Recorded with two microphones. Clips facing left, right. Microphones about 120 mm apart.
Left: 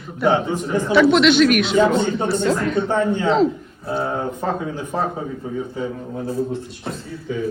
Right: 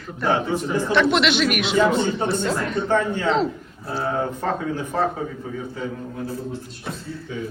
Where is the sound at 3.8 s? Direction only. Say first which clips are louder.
Left 1 dB; 20° left (ahead or behind).